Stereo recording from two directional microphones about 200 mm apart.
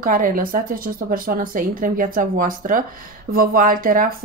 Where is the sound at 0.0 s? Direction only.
45° right (ahead or behind).